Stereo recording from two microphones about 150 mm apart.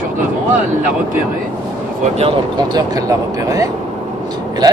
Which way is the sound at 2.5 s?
25° right (ahead or behind).